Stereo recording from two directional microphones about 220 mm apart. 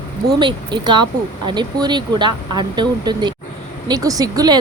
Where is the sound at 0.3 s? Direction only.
20° right (ahead or behind).